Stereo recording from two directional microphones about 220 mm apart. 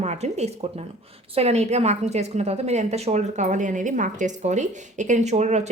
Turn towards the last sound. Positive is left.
turn(degrees=-30)  # may be behind; listen again after turning